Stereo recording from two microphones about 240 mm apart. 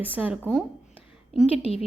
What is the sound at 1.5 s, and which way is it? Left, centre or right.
Speech, left.